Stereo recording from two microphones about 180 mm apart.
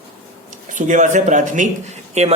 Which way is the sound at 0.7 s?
45° right (ahead or behind).